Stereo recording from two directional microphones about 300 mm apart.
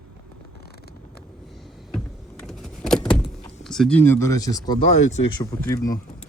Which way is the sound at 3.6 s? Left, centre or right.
Centre.